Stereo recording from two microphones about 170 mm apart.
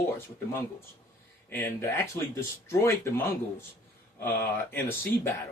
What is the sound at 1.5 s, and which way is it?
Speech, 15° left (ahead or behind).